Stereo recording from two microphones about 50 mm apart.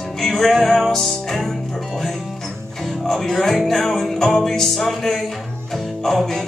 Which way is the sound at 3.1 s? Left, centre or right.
Centre.